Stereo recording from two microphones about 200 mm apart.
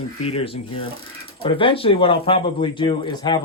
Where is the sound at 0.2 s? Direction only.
30° left (ahead or behind).